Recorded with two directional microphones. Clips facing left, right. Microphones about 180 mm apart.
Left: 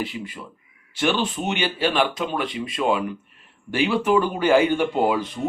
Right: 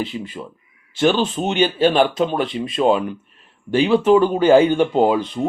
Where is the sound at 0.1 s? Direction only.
35° right (ahead or behind).